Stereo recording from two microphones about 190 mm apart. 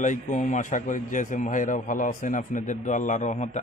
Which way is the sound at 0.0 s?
40° left (ahead or behind).